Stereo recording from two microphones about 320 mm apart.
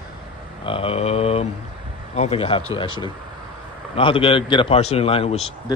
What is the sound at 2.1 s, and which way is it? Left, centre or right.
A man's voice, centre.